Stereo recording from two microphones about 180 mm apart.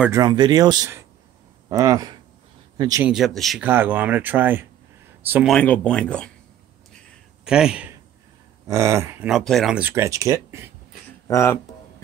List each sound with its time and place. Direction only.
0.0 s speech: 20° right (ahead or behind)
3.1 s speech: centre (ahead or behind)
5.5 s speech: 5° left (ahead or behind)
7.4 s speech: 5° right (ahead or behind)
8.6 s speech: 15° right (ahead or behind)
9.3 s speech: centre (ahead or behind); by 10.7 s 15° right (ahead or behind)
11.2 s speech: 15° left (ahead or behind)